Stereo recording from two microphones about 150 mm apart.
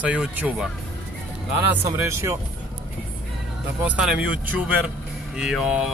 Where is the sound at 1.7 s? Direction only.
20° right (ahead or behind).